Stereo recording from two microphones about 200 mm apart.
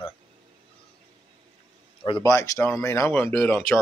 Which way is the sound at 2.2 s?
15° left (ahead or behind).